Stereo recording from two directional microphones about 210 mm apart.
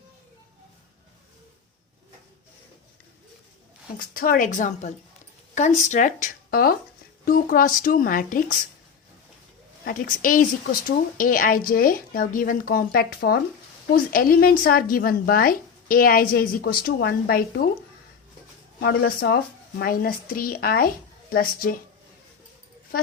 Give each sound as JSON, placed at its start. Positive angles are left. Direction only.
{"t": 3.9, "sound": "a woman's voice", "side_deg": 45}
{"t": 9.8, "sound": "speech", "side_deg": 40}
{"t": 18.8, "sound": "speech", "side_deg": 50}